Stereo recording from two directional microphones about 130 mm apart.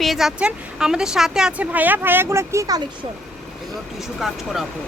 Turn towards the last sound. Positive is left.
turn(degrees=0)  # may be behind; listen again after turning